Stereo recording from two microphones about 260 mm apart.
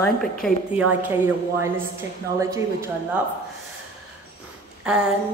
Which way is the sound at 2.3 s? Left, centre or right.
Centre.